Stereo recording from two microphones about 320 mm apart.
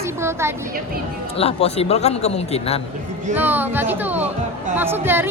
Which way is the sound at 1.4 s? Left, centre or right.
Centre.